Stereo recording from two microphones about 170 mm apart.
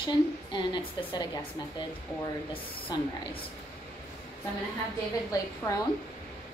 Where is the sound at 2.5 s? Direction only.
30° left (ahead or behind).